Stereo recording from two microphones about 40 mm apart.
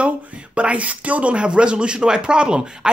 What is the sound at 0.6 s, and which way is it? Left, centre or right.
Speech, right.